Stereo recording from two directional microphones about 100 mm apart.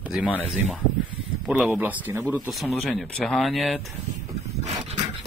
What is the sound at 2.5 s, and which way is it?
Speech, centre (ahead or behind).